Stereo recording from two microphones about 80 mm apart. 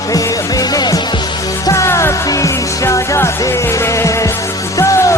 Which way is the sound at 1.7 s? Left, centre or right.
Left.